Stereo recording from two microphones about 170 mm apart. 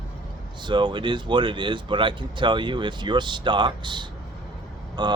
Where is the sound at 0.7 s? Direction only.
25° right (ahead or behind).